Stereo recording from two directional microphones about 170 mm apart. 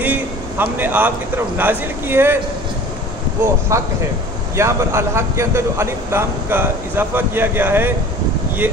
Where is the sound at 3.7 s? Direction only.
15° right (ahead or behind).